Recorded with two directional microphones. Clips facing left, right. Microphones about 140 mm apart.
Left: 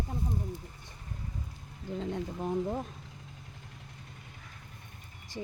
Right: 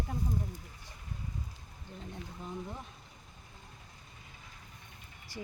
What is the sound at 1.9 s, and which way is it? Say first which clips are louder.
Speech: left 11 dB; 90° left.